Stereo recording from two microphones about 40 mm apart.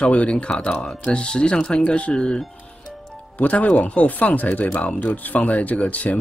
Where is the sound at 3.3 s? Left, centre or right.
Left.